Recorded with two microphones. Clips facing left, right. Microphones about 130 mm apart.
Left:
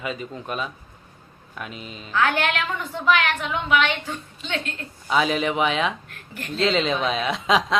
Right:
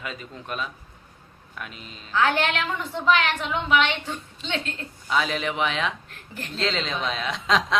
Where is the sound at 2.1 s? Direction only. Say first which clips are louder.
Even; 25° right (ahead or behind).